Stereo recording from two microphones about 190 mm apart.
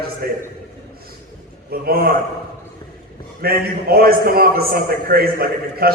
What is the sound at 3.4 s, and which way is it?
A man's voice, 50° right (ahead or behind).